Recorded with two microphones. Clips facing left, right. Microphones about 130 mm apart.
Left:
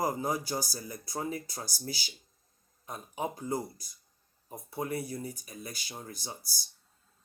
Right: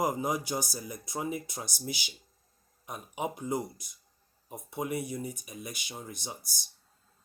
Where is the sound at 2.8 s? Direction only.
10° right (ahead or behind).